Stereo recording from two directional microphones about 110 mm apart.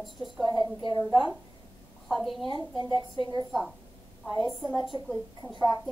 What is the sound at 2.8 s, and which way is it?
Speech, 40° right (ahead or behind).